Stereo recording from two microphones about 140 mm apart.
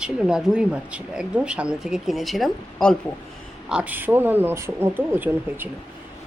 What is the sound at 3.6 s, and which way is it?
Speech, 10° right (ahead or behind).